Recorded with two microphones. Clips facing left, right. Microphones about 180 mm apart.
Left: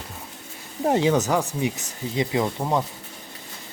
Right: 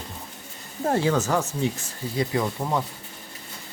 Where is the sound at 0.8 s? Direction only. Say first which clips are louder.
Left 2 dB; 20° left (ahead or behind).